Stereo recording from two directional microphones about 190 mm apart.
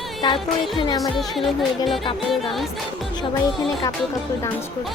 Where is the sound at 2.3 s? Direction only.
Centre (ahead or behind).